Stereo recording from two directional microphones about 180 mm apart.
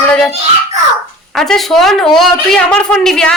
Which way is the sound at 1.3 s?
Centre (ahead or behind).